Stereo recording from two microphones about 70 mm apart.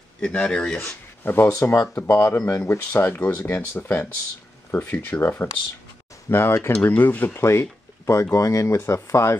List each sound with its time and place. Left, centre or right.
0.2 s speech: centre
1.2 s speech: left
1.5 s speech: left
3.5 s speech: left
6.7 s speech: left
7.3 s speech: left